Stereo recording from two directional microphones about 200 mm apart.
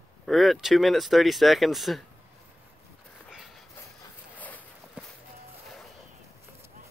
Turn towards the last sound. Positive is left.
turn(degrees=10)  # may be behind; listen again after turning